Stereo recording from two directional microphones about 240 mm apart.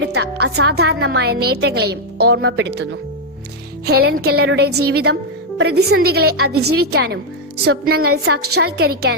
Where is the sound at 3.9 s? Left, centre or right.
Right.